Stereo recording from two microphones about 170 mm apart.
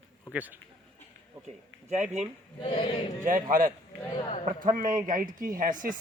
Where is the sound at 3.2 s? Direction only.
50° right (ahead or behind).